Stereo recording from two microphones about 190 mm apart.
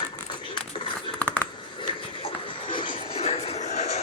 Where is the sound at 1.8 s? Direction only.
25° left (ahead or behind).